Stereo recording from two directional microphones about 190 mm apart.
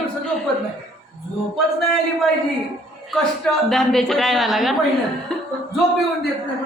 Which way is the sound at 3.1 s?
Centre (ahead or behind).